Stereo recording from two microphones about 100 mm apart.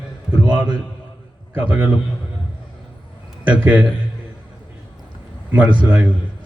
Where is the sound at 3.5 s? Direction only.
15° right (ahead or behind).